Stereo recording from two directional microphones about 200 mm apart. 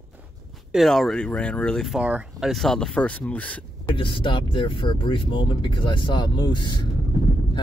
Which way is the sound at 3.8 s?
25° left (ahead or behind).